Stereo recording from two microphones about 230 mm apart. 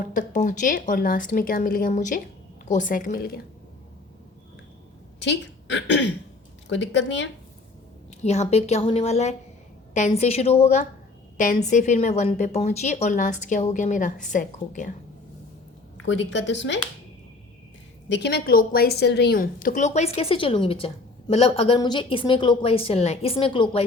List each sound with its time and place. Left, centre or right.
0.0 s a woman's voice: left
5.2 s a woman's voice: left
8.2 s a woman's voice: left
16.0 s speech: left
18.1 s a woman's voice: left